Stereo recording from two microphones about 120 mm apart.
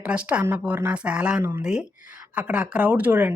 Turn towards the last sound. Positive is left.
turn(degrees=-15)  # may be behind; listen again after turning